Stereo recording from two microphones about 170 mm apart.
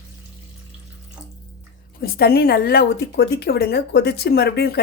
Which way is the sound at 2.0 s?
65° left (ahead or behind).